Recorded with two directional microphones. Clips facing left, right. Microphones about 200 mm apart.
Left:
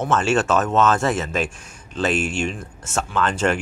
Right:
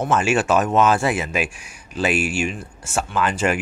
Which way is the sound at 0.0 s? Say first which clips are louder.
Even; 10° right (ahead or behind).